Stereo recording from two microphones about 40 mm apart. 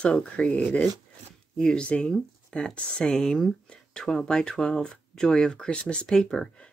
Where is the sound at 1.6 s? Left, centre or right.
Centre.